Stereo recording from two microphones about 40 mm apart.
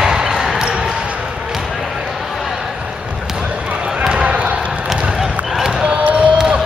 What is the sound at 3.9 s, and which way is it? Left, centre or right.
Basketball bounce, right.